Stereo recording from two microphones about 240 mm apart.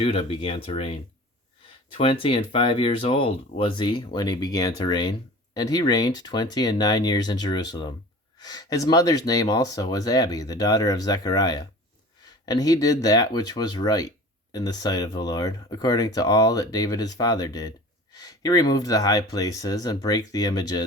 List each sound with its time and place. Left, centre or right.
0.0 s speech: left
2.0 s speech: left